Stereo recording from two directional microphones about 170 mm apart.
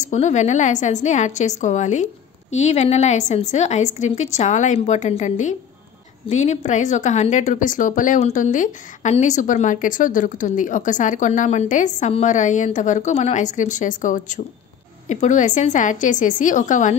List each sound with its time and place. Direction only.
0.0 s a woman's voice: 45° left (ahead or behind)